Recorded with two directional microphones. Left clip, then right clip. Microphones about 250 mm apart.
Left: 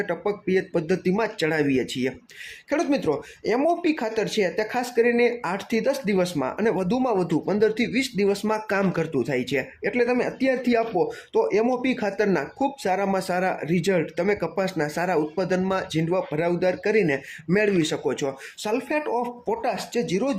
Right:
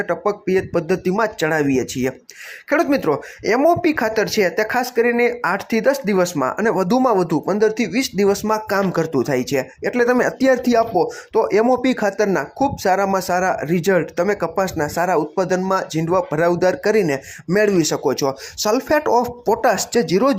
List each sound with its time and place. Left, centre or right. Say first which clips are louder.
0.0 s speech: right 6 dB; centre